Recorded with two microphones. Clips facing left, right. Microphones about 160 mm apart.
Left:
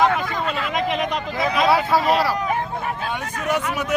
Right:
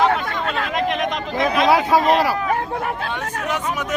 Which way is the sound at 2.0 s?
45° right (ahead or behind).